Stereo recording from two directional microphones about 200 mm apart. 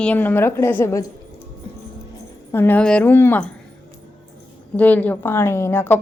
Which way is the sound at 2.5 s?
10° left (ahead or behind).